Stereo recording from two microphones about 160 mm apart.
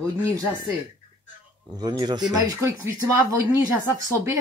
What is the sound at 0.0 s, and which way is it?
Speech, 20° right (ahead or behind).